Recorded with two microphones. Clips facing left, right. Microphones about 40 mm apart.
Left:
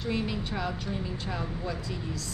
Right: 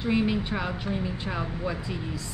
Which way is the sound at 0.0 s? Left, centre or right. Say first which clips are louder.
Right 6 dB; right.